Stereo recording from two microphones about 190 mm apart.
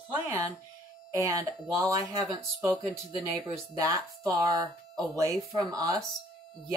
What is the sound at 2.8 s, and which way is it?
Speech, centre (ahead or behind).